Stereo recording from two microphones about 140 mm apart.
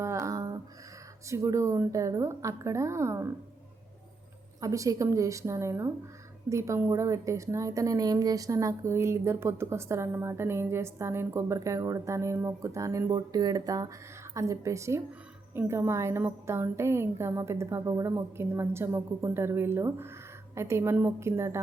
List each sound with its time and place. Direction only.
0.0 s a sound: 20° right (ahead or behind)
1.3 s a woman's voice: 20° right (ahead or behind)
4.6 s a woman's voice: 25° right (ahead or behind)